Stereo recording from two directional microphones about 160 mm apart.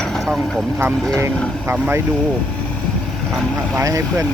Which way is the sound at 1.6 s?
15° right (ahead or behind).